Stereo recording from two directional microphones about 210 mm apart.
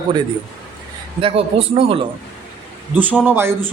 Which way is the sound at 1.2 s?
25° right (ahead or behind).